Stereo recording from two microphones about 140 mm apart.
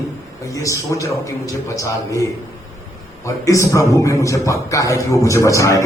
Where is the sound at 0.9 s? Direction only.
25° left (ahead or behind).